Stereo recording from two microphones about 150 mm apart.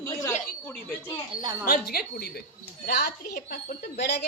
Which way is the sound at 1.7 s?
90° left.